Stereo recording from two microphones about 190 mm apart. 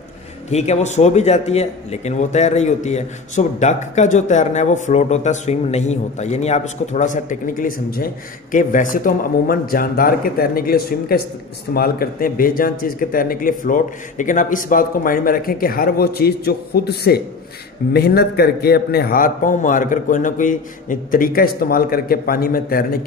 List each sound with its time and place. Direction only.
0.5 s a man's voice: 35° left (ahead or behind)